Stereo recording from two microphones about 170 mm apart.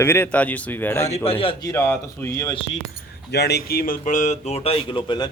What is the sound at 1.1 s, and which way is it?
Speech, 35° left (ahead or behind).